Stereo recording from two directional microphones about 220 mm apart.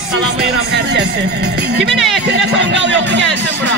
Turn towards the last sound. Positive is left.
turn(degrees=-55)  # may be behind; listen again after turning